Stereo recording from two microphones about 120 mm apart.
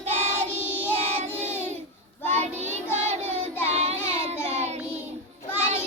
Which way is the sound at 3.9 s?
20° left (ahead or behind).